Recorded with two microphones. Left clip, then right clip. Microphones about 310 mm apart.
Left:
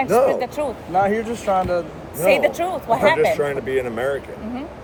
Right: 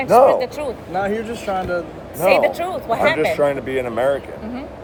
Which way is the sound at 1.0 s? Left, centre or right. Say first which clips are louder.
Left 4 dB; left.